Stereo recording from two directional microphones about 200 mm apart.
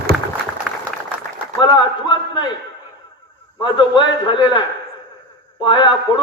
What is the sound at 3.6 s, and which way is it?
A man's voice, 20° left (ahead or behind).